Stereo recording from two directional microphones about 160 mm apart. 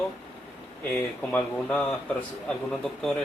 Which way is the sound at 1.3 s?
10° left (ahead or behind).